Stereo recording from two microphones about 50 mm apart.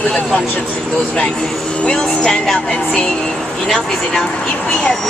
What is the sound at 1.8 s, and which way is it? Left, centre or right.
Speech, centre.